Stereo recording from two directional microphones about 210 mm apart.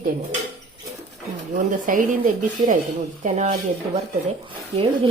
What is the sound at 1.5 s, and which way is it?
Speech, 40° right (ahead or behind).